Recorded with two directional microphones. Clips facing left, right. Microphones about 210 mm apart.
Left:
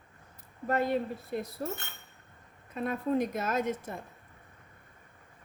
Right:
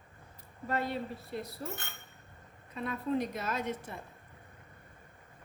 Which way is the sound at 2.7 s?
45° left (ahead or behind).